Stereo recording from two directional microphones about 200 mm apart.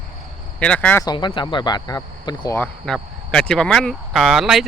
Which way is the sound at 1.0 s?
25° left (ahead or behind).